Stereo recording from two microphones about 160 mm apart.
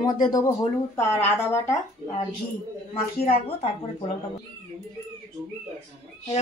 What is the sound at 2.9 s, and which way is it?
Speech, 35° left (ahead or behind).